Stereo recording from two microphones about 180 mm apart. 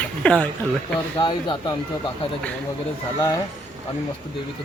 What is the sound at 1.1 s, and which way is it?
Speech, 25° left (ahead or behind).